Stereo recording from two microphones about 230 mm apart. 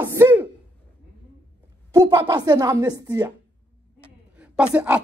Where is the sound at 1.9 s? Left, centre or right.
Centre.